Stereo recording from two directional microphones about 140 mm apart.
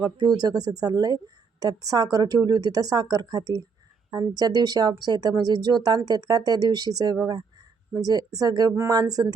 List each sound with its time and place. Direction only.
0.2 s a woman's voice: 30° right (ahead or behind)